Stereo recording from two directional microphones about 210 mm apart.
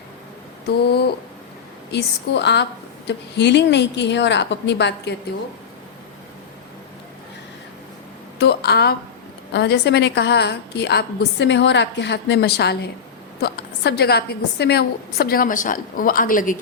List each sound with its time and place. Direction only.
0.7 s a woman's voice: 50° left (ahead or behind)
8.4 s a woman's voice: 50° left (ahead or behind)